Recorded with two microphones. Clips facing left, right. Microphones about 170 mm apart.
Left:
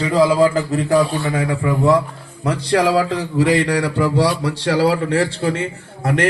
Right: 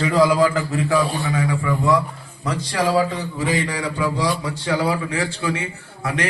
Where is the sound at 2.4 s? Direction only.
65° left (ahead or behind).